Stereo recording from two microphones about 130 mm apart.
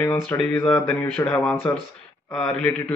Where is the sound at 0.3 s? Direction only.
20° left (ahead or behind).